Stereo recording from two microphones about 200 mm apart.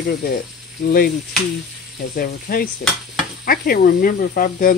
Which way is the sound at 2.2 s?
50° left (ahead or behind).